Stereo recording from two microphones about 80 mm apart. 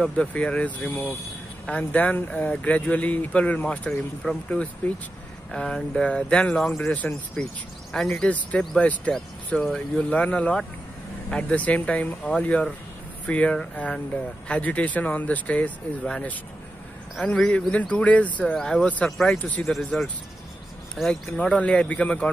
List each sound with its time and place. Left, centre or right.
0.0 s speech: centre
6.5 s speech: centre
6.8 s speech: left
7.9 s speech: centre
19.3 s speech: centre